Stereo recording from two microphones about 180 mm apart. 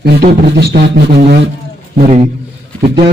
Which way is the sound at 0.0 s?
65° right (ahead or behind).